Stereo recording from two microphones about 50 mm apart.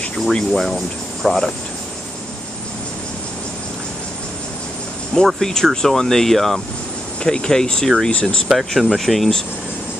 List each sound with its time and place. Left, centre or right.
0.1 s speech: centre
5.4 s speech: centre
8.5 s speech: centre